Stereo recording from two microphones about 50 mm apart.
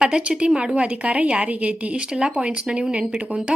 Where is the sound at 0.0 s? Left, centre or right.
Right.